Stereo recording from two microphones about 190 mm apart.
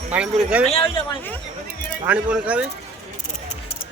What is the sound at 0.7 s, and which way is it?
Speech, 30° left (ahead or behind).